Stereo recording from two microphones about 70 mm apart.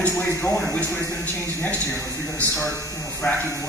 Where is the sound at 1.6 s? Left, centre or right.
Left.